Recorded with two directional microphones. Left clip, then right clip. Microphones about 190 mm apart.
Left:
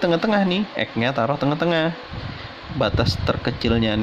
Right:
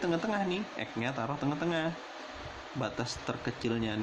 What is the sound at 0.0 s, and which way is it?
Speech, 45° left (ahead or behind).